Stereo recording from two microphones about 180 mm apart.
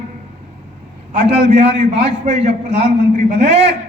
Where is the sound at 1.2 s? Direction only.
35° right (ahead or behind).